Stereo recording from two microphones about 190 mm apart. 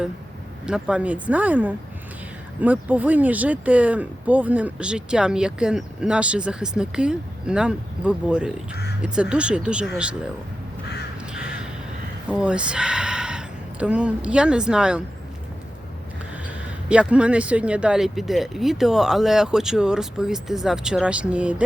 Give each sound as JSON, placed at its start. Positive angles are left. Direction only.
{"t": 0.6, "sound": "speech", "side_deg": -5}
{"t": 8.7, "sound": "crow", "side_deg": 60}
{"t": 9.0, "sound": "speech", "side_deg": -5}
{"t": 11.3, "sound": "crow", "side_deg": -5}
{"t": 12.3, "sound": "speech", "side_deg": -5}
{"t": 16.9, "sound": "speech", "side_deg": -5}